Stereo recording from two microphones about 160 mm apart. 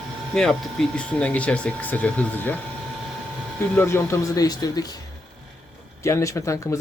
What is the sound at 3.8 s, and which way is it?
Speech, 15° left (ahead or behind).